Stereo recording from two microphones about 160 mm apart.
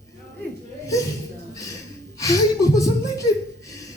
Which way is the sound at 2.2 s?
20° left (ahead or behind).